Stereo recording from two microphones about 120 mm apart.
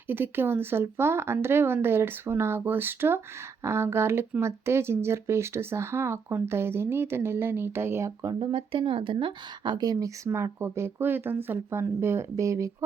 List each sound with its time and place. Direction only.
0.1 s speech: 20° right (ahead or behind); by 10.1 s 35° right (ahead or behind)
10.2 s speech: 20° right (ahead or behind)